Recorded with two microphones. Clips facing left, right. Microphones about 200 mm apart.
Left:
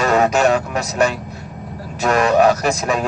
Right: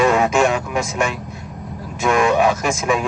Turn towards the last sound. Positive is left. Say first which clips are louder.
# even
turn(degrees=40)  # may be behind; listen again after turning